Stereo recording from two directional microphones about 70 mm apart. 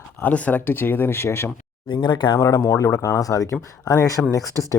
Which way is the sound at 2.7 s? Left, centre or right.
Left.